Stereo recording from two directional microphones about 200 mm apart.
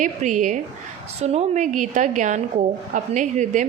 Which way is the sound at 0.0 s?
40° right (ahead or behind).